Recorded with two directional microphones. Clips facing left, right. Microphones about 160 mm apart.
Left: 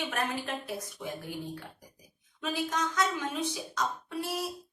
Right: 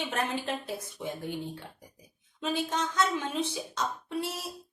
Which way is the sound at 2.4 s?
30° right (ahead or behind).